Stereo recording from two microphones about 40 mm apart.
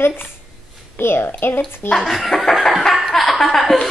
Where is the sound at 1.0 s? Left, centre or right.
Left.